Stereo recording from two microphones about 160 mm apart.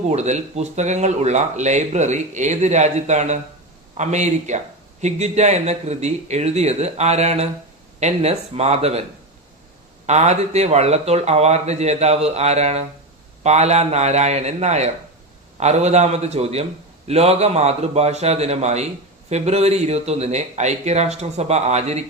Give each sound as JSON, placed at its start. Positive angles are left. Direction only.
{"t": 0.1, "sound": "speech", "side_deg": -45}
{"t": 10.1, "sound": "speech", "side_deg": -45}